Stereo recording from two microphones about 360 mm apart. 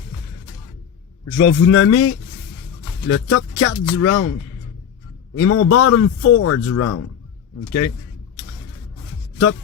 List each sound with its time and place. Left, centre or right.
1.2 s a man's voice: left